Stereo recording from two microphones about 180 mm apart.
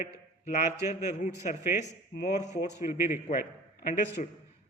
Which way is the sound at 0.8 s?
40° left (ahead or behind).